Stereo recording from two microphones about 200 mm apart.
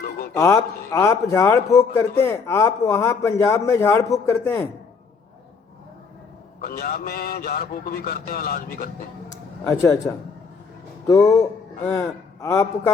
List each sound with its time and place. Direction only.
0.3 s a man's voice: 15° left (ahead or behind)
6.6 s a man's voice: 50° left (ahead or behind)
9.6 s a man's voice: 15° left (ahead or behind)
11.1 s a man's voice: 15° left (ahead or behind)